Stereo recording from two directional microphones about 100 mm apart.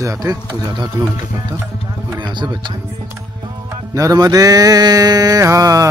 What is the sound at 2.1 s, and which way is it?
Speech, 50° right (ahead or behind).